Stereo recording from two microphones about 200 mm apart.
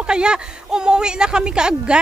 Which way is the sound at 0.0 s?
5° right (ahead or behind).